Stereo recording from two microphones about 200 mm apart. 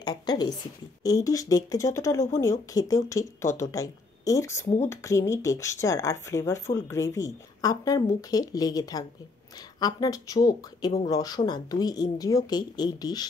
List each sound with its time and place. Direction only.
0.0 s a woman's voice: 20° left (ahead or behind)